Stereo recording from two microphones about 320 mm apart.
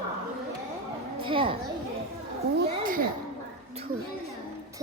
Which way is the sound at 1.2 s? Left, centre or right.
Centre.